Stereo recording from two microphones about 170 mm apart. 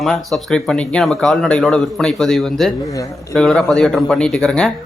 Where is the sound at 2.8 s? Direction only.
20° left (ahead or behind).